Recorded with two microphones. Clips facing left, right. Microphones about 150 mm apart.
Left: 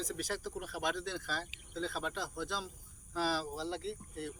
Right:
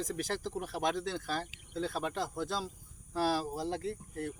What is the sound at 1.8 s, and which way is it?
Speech, 45° right (ahead or behind).